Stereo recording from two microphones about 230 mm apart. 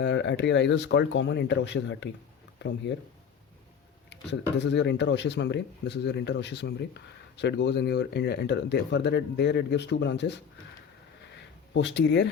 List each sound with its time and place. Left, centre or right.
0.0 s speech: left
4.5 s speech: left
11.7 s speech: left